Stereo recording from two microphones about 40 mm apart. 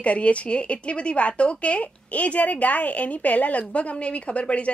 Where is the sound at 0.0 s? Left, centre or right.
Left.